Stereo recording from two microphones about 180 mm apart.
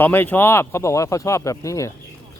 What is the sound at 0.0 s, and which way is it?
Speech, 10° left (ahead or behind).